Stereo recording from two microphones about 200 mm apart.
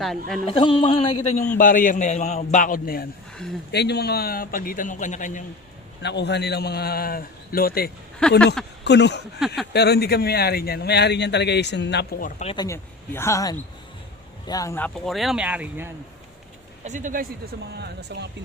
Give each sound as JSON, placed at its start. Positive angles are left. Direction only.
{"t": 0.4, "sound": "speech", "side_deg": 25}
{"t": 1.5, "sound": "a man's voice", "side_deg": 45}
{"t": 6.0, "sound": "a man's voice", "side_deg": 60}
{"t": 8.2, "sound": "speech", "side_deg": 5}
{"t": 8.8, "sound": "speech", "side_deg": 60}
{"t": 12.2, "sound": "speech", "side_deg": 35}
{"t": 12.5, "sound": "speech", "side_deg": 15}
{"t": 16.8, "sound": "speech", "side_deg": -40}
{"t": 17.7, "sound": "speech", "side_deg": -55}